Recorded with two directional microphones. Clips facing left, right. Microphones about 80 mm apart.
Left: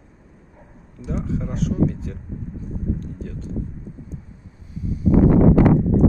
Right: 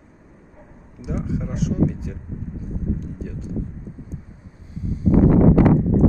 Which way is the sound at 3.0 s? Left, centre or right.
Centre.